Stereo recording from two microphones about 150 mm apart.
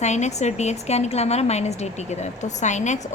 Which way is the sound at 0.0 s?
50° left (ahead or behind).